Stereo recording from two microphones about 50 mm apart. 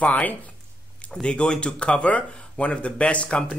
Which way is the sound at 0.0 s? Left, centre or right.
Left.